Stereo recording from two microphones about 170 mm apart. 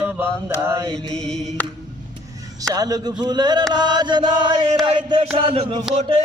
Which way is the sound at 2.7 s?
20° right (ahead or behind).